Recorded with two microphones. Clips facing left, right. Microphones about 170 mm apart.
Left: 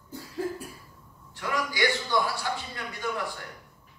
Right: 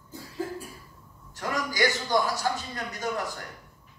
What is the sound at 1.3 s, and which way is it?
A man's voice, 40° right (ahead or behind).